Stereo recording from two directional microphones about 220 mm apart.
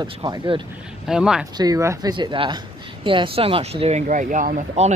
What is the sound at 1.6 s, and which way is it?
Speech, 15° right (ahead or behind).